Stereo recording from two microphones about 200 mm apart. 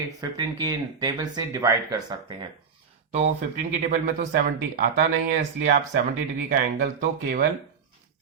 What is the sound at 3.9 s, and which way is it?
Speech, 45° right (ahead or behind).